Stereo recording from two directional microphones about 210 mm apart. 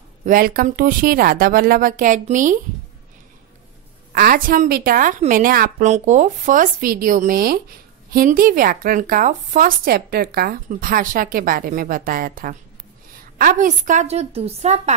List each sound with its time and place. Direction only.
0.2 s a woman's voice: 40° right (ahead or behind)
4.1 s a woman's voice: 40° right (ahead or behind)